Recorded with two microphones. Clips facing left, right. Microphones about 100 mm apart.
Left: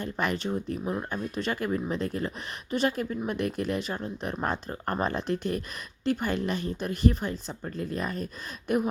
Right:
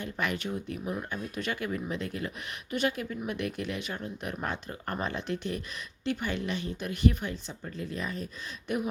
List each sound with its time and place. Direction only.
0.0 s speech: 35° left (ahead or behind)